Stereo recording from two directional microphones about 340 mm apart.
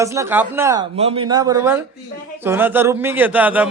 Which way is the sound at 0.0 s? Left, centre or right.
Centre.